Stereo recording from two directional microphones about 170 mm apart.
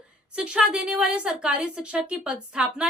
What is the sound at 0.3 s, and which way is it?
A woman's voice, 5° right (ahead or behind).